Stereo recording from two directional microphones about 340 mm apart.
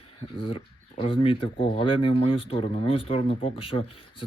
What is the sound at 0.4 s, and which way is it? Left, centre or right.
Speech, centre.